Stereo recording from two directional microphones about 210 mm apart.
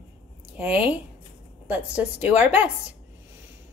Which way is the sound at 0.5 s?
10° right (ahead or behind).